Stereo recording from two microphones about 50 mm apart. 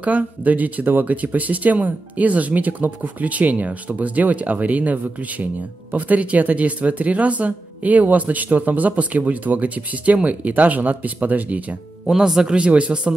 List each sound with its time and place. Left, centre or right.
0.0 s speech: right
12.1 s speech: centre
12.5 s speech: right